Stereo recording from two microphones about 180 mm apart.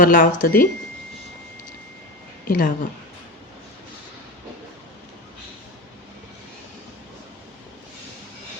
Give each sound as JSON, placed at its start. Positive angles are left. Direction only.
{"t": 0.0, "sound": "speech", "side_deg": 55}
{"t": 2.5, "sound": "speech", "side_deg": 50}